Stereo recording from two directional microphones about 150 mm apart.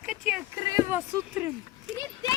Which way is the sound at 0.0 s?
5° right (ahead or behind).